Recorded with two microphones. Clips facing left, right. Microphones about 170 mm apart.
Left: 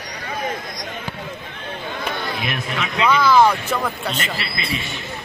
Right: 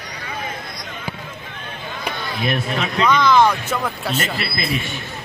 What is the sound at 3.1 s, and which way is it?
Speech, 5° left (ahead or behind).